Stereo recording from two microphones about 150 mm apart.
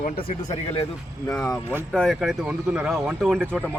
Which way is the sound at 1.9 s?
Centre (ahead or behind).